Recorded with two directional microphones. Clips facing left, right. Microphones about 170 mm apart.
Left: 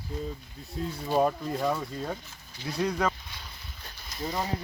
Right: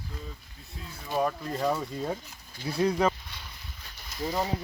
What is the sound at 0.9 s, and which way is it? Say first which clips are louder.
Speech: left 3 dB; 25° left (ahead or behind).